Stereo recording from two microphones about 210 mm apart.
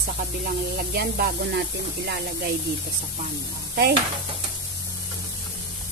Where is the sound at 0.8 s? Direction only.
45° right (ahead or behind).